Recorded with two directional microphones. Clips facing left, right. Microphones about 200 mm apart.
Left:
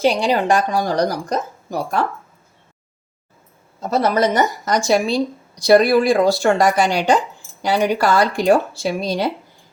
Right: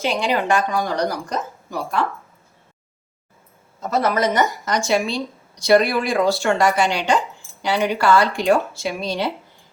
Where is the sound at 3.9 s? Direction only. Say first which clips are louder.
Left 2 dB; 35° left (ahead or behind).